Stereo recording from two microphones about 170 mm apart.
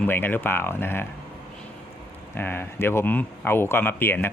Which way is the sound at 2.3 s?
10° left (ahead or behind).